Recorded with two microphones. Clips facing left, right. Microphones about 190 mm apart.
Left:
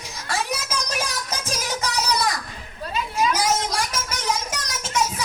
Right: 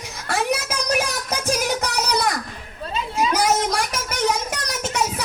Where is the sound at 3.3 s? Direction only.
60° right (ahead or behind).